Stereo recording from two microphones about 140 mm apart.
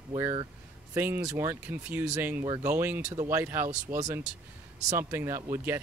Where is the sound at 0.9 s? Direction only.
15° right (ahead or behind).